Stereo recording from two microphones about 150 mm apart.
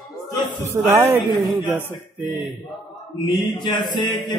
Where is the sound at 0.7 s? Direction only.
15° right (ahead or behind).